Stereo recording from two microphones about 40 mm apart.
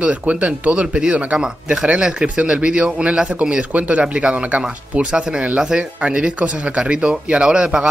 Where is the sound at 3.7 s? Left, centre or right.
Right.